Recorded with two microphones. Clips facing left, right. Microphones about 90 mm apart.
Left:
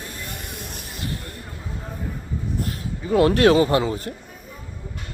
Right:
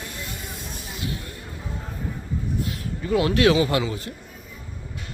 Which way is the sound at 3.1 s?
45° left (ahead or behind).